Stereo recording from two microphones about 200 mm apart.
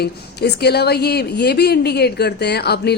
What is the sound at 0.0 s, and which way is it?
A woman's voice, 55° left (ahead or behind).